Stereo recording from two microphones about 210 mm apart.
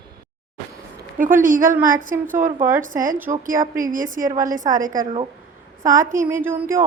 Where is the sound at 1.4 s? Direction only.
40° right (ahead or behind).